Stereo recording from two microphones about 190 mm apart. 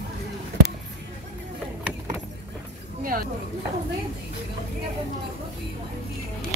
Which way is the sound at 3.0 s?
50° right (ahead or behind).